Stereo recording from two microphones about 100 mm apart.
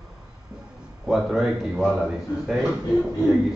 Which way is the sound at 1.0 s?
5° right (ahead or behind).